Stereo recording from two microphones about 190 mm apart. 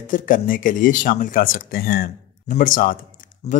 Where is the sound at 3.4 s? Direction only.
35° left (ahead or behind).